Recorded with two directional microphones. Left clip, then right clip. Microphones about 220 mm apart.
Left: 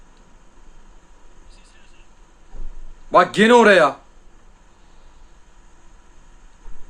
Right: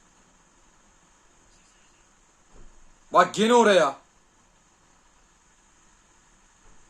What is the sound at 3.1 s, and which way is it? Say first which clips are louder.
Speech: left 6 dB; centre (ahead or behind).